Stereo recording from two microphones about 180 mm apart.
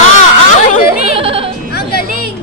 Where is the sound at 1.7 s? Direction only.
60° left (ahead or behind).